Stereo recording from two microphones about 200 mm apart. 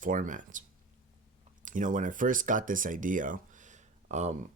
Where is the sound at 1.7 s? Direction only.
40° right (ahead or behind).